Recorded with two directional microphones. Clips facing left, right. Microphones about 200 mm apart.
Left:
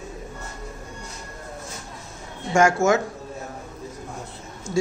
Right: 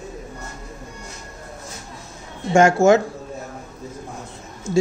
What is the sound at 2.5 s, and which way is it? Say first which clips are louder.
Speech: right 5 dB; 25° right (ahead or behind).